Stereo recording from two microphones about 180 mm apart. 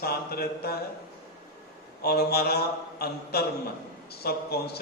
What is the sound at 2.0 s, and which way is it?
A man's voice, 60° left (ahead or behind).